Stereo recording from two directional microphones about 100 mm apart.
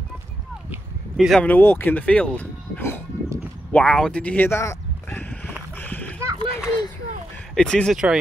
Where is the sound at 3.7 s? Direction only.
10° left (ahead or behind); by 5.3 s 25° left (ahead or behind).